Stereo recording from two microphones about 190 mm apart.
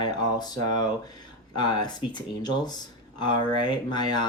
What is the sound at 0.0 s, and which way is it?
Speech, 20° left (ahead or behind).